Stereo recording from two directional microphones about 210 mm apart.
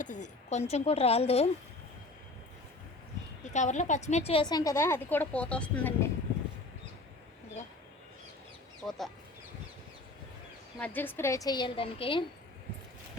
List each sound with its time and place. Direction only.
0.0 s a woman's voice: 35° left (ahead or behind)
3.5 s a woman's voice: 35° left (ahead or behind); by 6.1 s 10° left (ahead or behind)
8.8 s speech: centre (ahead or behind)
10.8 s a woman's voice: 10° left (ahead or behind); by 12.2 s 25° left (ahead or behind)